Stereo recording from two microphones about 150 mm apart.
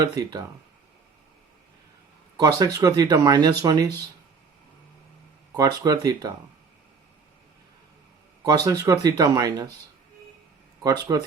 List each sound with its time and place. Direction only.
0.2 s speech: 25° right (ahead or behind)
2.4 s speech: 25° right (ahead or behind)
5.5 s speech: 25° right (ahead or behind)
8.4 s speech: 25° right (ahead or behind)
11.1 s speech: 25° right (ahead or behind)